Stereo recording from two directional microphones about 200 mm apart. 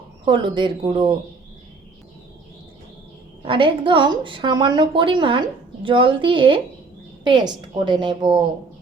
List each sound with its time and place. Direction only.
0.3 s a woman's voice: 25° right (ahead or behind)
3.4 s a woman's voice: 25° right (ahead or behind)